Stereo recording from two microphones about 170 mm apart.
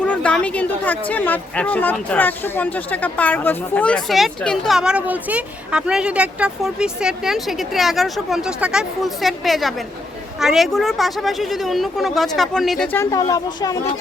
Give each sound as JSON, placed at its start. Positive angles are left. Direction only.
{"t": 0.0, "sound": "a woman's voice", "side_deg": 5}
{"t": 13.0, "sound": "speech", "side_deg": 20}